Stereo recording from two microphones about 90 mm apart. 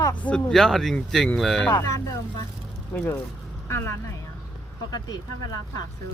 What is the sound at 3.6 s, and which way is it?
Speech, 30° left (ahead or behind).